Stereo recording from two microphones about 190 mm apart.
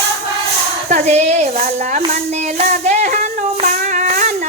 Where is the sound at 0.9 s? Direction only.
35° right (ahead or behind).